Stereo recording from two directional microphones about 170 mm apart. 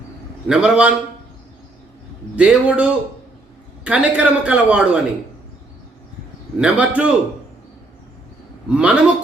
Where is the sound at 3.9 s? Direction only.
5° right (ahead or behind).